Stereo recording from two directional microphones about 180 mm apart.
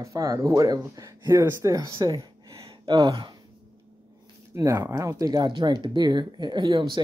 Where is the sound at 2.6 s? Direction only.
25° right (ahead or behind).